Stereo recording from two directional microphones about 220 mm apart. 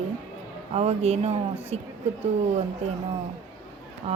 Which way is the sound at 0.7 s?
30° right (ahead or behind).